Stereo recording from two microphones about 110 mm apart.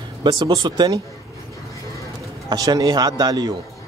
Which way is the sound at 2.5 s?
40° right (ahead or behind).